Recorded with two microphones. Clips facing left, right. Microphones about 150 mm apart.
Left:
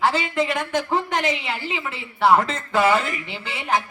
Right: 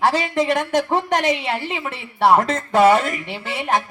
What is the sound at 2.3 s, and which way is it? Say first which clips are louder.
Speech: right 2 dB; 45° right (ahead or behind).